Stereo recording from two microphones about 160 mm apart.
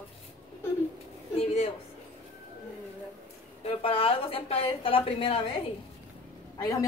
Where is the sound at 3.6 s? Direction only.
35° left (ahead or behind).